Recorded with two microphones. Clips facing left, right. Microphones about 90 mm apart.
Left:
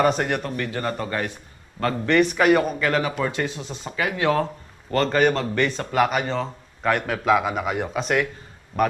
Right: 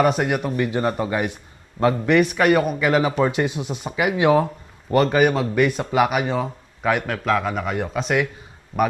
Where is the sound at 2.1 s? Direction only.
Centre (ahead or behind).